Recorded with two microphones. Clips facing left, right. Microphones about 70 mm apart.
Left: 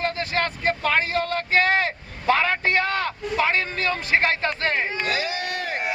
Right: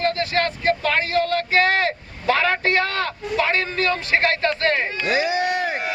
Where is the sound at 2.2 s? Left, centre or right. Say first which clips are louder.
Right 1 dB; centre.